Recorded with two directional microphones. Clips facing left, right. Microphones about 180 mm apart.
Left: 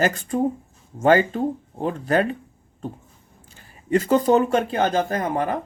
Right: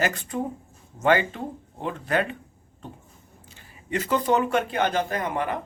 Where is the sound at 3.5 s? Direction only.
40° left (ahead or behind).